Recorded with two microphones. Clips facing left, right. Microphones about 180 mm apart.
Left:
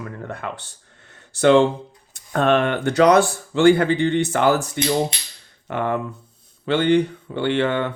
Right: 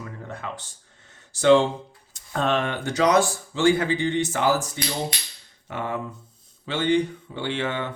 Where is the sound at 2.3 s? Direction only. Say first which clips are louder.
Left 6 dB; 60° left (ahead or behind).